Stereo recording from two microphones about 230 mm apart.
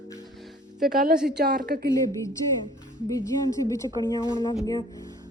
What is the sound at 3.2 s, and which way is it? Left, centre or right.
Speech, centre.